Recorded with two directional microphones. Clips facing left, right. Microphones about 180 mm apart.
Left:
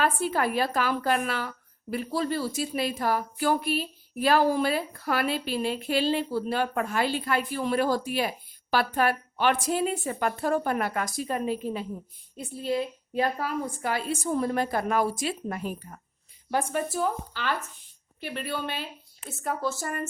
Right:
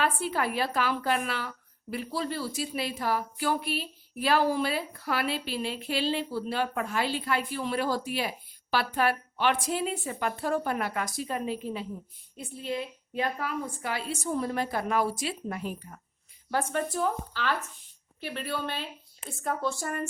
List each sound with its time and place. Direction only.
0.0 s a woman's voice: 45° left (ahead or behind)
16.5 s a woman's voice: 10° left (ahead or behind)